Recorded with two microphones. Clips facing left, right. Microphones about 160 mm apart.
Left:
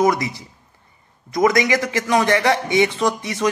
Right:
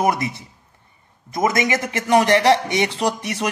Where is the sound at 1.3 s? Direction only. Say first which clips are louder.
Left 3 dB; 25° right (ahead or behind).